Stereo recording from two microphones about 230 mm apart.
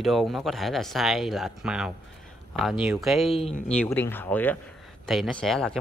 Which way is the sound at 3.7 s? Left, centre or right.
Centre.